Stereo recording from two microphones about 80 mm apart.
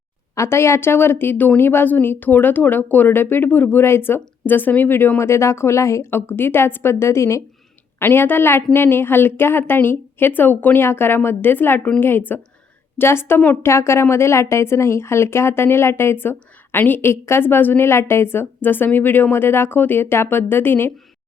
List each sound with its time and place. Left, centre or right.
0.3 s speech: left